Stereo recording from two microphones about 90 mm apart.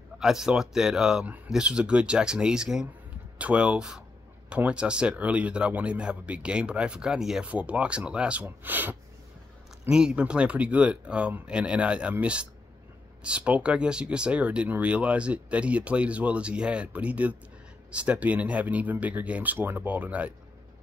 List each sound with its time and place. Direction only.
0.2 s speech: 5° right (ahead or behind); by 8.9 s 20° right (ahead or behind)
9.8 s speech: 10° right (ahead or behind)